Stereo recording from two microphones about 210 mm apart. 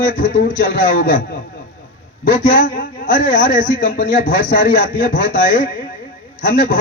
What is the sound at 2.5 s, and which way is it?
A man's voice, 40° left (ahead or behind).